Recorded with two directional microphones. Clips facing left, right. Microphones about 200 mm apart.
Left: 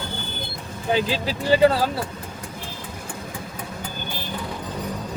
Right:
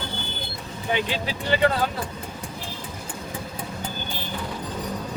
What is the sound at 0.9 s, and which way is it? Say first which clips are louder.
Speech: left 4 dB; 35° left (ahead or behind).